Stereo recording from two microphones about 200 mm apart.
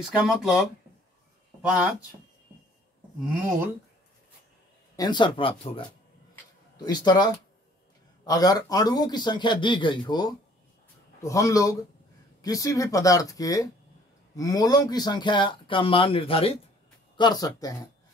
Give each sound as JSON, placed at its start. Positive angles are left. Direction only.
{"t": 0.0, "sound": "speech", "side_deg": -5}
{"t": 4.9, "sound": "speech", "side_deg": 20}
{"t": 6.3, "sound": "a sound", "side_deg": 20}
{"t": 8.2, "sound": "speech", "side_deg": 20}